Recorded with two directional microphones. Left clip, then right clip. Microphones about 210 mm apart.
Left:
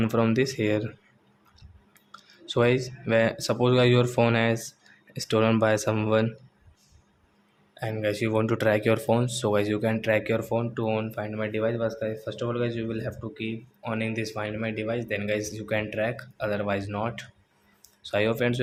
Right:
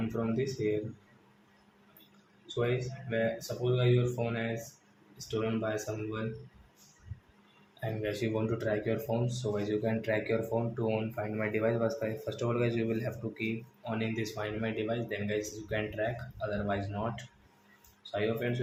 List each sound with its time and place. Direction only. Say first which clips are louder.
2.6 s speech: left 9 dB; 50° left (ahead or behind)
7.8 s speech: left 7 dB; 30° left (ahead or behind)
13.8 s speech: left 5 dB; 30° left (ahead or behind); by 18.5 s 45° left (ahead or behind)